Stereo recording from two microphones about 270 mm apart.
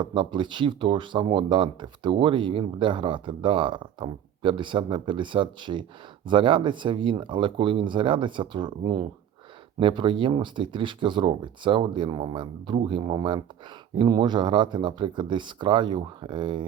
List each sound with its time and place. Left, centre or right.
0.0 s speech: centre